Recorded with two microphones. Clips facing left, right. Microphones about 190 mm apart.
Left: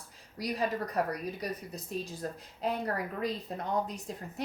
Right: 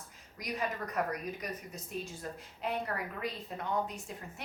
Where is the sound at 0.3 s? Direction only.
35° left (ahead or behind).